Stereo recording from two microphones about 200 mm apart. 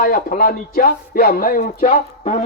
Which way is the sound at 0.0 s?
45° left (ahead or behind).